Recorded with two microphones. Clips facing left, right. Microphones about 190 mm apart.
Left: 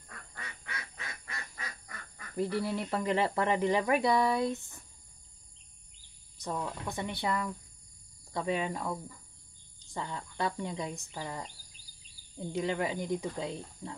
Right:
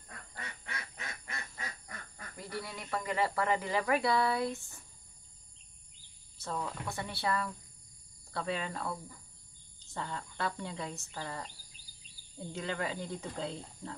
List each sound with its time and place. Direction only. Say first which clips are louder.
0.9 s honk: even; 25° right (ahead or behind)
2.3 s speech: left 11 dB; 30° left (ahead or behind)
6.3 s speech: left 2 dB; 15° left (ahead or behind)
9.9 s speech: left 3 dB; 15° left (ahead or behind)
12.5 s speech: left 5 dB; 15° left (ahead or behind)